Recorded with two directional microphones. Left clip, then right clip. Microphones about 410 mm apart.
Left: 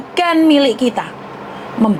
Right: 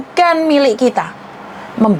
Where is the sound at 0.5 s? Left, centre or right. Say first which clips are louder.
Right 1 dB; right.